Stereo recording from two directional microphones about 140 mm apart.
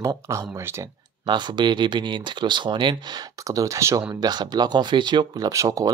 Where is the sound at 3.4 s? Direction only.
25° right (ahead or behind).